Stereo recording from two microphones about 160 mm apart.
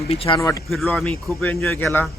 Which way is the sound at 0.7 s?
5° left (ahead or behind).